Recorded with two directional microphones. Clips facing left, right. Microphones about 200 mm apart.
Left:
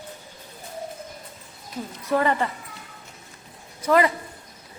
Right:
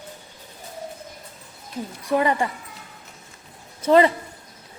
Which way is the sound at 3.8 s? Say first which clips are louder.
Right 4 dB; 25° right (ahead or behind).